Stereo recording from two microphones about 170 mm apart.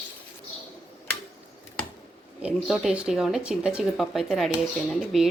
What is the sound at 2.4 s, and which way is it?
Speech, 5° right (ahead or behind).